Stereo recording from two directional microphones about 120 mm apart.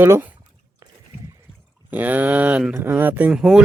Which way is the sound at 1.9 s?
15° right (ahead or behind).